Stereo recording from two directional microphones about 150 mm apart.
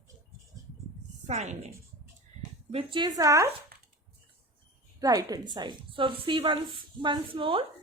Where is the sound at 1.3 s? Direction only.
50° right (ahead or behind).